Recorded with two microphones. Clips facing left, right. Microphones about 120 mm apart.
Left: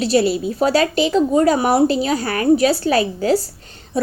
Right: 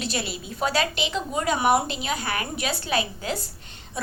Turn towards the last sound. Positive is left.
turn(degrees=35)  # may be behind; listen again after turning